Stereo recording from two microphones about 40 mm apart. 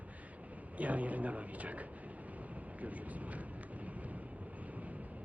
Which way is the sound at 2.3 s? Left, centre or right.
Right.